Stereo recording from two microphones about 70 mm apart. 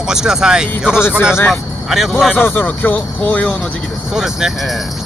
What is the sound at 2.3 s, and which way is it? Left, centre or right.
Speech, left.